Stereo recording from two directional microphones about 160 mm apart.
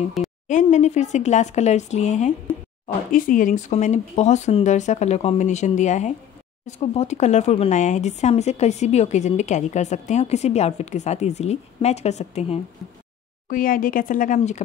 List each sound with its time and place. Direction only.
0.2 s a sound: centre (ahead or behind)
0.5 s speech: 50° left (ahead or behind)
3.1 s speech: 60° left (ahead or behind)
13.5 s speech: 60° left (ahead or behind)